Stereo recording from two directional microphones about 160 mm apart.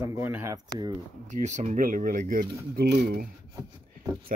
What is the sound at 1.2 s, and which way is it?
Speech, 50° right (ahead or behind).